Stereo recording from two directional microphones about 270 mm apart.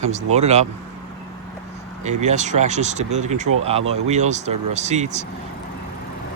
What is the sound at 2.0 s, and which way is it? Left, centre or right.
Speech, right.